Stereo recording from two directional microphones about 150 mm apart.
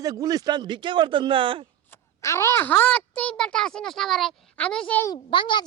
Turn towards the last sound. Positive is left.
turn(degrees=30)  # may be behind; listen again after turning